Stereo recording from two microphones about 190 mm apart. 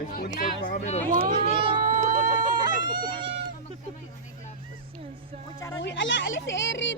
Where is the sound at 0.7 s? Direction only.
35° left (ahead or behind).